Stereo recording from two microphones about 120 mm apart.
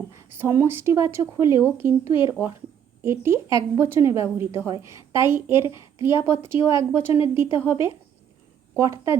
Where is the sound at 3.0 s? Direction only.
20° right (ahead or behind).